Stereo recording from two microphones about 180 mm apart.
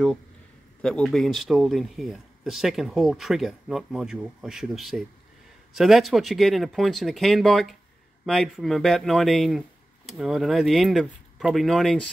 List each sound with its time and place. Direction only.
0.8 s speech: 5° left (ahead or behind)